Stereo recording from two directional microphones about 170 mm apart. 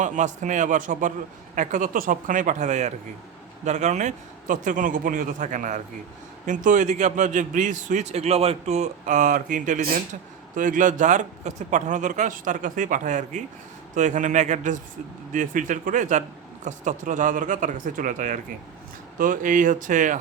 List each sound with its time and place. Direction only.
0.0 s a man's voice: 45° right (ahead or behind)